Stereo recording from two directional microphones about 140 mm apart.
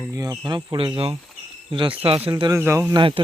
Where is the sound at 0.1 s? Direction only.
25° right (ahead or behind); by 2.2 s 40° right (ahead or behind).